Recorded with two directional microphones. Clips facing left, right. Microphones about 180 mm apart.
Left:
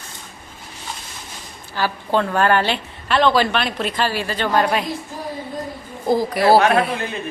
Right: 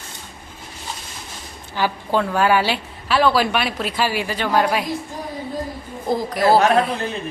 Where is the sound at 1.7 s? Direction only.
10° right (ahead or behind).